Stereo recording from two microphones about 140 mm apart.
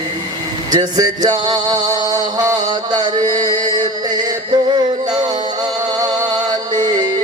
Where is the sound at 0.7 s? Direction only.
30° right (ahead or behind).